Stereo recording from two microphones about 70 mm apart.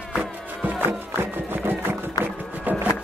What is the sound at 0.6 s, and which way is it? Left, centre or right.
Music, right.